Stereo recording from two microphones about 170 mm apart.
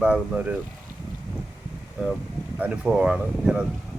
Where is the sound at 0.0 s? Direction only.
5° right (ahead or behind).